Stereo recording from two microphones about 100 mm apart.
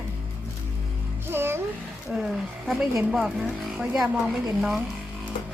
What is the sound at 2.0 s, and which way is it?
A woman's voice, 5° right (ahead or behind).